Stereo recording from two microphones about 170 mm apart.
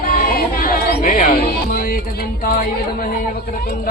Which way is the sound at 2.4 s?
55° left (ahead or behind).